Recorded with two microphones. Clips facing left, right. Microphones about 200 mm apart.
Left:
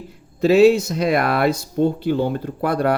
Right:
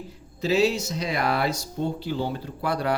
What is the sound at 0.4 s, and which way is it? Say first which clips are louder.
Speech: left 10 dB; 55° left (ahead or behind).